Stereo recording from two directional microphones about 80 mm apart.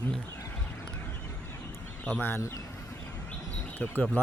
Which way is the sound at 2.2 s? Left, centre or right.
Left.